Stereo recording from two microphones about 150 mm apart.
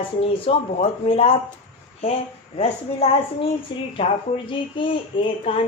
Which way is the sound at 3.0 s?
40° left (ahead or behind).